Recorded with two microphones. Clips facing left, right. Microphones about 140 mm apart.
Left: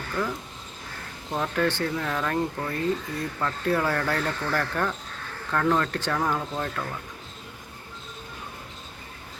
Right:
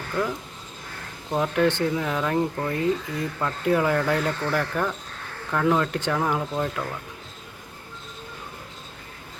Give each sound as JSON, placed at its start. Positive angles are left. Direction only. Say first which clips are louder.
{"t": 0.2, "sound": "speech", "louder": "right 3 dB", "side_deg": -10}